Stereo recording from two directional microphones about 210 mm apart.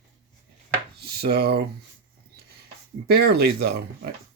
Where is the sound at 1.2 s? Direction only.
50° right (ahead or behind).